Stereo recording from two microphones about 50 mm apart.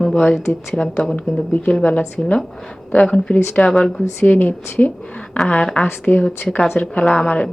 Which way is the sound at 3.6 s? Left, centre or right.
Centre.